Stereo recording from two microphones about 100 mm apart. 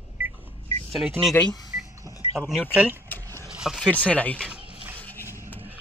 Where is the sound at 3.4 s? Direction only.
5° right (ahead or behind).